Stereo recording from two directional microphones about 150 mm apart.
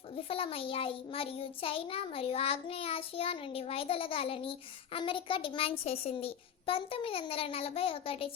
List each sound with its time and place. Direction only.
0.2 s a child's voice: 40° left (ahead or behind)